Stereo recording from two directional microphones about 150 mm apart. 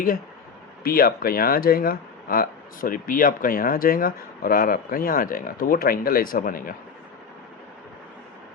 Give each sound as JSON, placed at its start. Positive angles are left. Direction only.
{"t": 0.9, "sound": "speech", "side_deg": 80}